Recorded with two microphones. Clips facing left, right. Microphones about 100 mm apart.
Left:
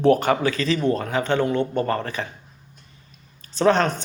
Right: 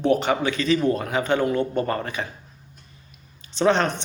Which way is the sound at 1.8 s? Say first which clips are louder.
Left 2 dB; 30° right (ahead or behind).